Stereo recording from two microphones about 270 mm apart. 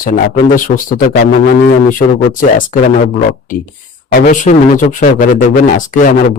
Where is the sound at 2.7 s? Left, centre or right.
Left.